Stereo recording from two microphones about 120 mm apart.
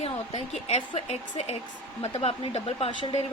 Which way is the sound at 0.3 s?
65° left (ahead or behind).